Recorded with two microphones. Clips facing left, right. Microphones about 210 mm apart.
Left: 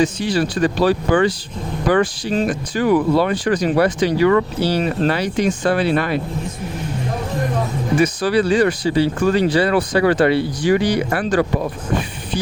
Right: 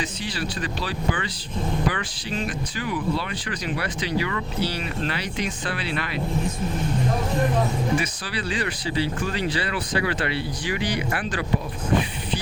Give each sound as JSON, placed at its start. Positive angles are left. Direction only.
{"t": 0.0, "sound": "speech", "side_deg": 45}
{"t": 7.9, "sound": "speech", "side_deg": 45}